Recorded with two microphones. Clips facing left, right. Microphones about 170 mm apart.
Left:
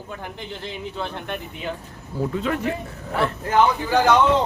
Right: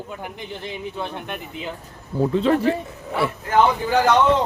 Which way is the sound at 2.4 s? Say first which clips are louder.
Right 7 dB; 30° right (ahead or behind).